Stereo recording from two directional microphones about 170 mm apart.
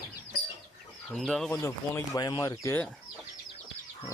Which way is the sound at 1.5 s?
15° left (ahead or behind).